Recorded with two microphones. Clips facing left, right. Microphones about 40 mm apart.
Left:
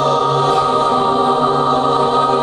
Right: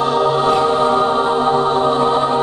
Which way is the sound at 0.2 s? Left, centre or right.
Right.